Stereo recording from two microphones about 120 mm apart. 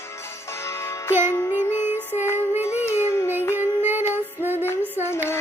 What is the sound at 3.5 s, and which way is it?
Female singing, 15° right (ahead or behind).